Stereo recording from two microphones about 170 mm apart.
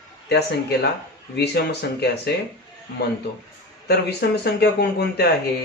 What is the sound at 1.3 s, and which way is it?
Speech, 75° left (ahead or behind).